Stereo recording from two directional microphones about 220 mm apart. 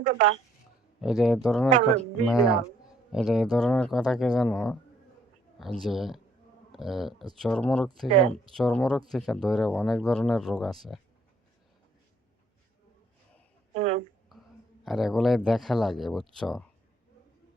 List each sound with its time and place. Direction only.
0.0 s a woman's voice: 35° right (ahead or behind)
1.0 s speech: centre (ahead or behind)
13.7 s a sound: 30° right (ahead or behind)
14.8 s speech: centre (ahead or behind)